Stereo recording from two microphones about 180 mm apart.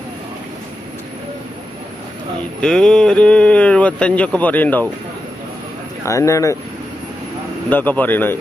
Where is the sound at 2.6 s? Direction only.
5° left (ahead or behind).